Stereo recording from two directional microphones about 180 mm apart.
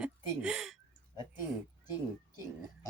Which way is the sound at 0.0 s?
5° right (ahead or behind).